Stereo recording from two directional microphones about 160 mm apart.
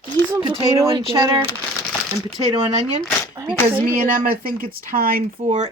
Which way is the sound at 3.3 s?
30° right (ahead or behind).